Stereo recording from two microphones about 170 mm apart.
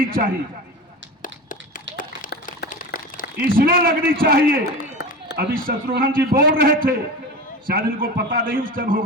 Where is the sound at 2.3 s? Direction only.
75° left (ahead or behind).